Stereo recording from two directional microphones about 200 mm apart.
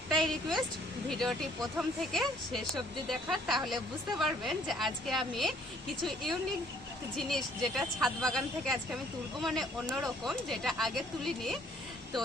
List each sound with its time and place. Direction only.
0.1 s a woman's voice: centre (ahead or behind)